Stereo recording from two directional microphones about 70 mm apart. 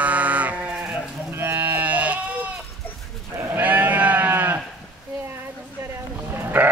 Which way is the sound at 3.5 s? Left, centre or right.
Right.